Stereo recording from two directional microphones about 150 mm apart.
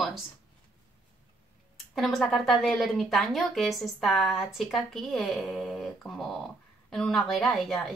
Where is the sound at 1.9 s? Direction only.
Centre (ahead or behind).